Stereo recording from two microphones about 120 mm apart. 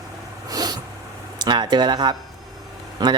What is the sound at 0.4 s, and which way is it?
Snort, 30° right (ahead or behind).